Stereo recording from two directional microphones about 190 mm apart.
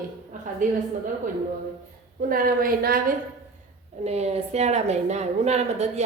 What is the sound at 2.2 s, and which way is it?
Speech, 50° right (ahead or behind).